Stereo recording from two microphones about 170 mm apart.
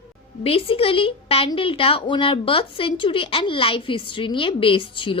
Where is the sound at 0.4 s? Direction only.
35° left (ahead or behind).